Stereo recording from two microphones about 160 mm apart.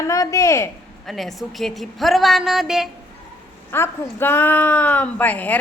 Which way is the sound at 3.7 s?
15° left (ahead or behind).